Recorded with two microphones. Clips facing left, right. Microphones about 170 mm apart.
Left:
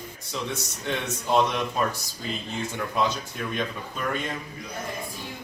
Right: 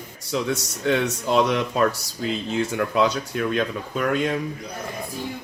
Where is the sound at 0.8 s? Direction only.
80° right.